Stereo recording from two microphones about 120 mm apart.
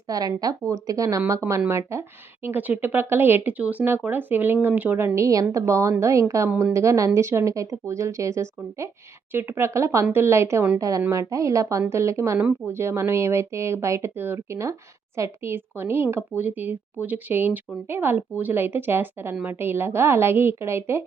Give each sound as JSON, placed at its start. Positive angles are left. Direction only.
{"t": 0.1, "sound": "speech", "side_deg": -30}
{"t": 6.5, "sound": "speech", "side_deg": -10}
{"t": 6.7, "sound": "speech", "side_deg": -25}